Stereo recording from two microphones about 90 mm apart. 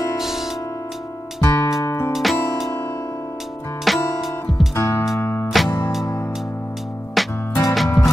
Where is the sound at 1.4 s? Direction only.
25° left (ahead or behind).